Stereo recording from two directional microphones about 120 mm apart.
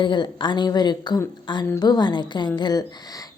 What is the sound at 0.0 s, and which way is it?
A woman's voice, 40° left (ahead or behind).